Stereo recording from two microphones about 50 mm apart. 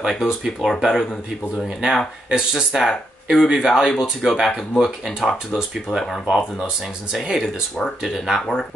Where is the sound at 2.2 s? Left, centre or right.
Centre.